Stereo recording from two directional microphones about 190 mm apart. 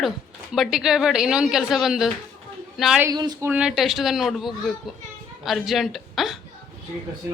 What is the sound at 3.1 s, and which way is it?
Speech, 20° right (ahead or behind).